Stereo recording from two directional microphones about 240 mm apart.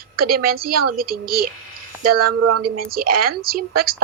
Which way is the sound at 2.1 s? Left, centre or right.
Right.